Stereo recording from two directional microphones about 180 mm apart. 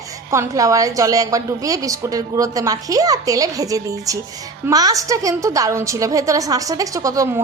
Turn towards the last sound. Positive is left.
turn(degrees=-20)  # may be behind; listen again after turning